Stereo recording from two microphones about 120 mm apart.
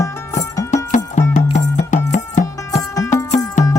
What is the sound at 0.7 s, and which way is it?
Music, 90° left.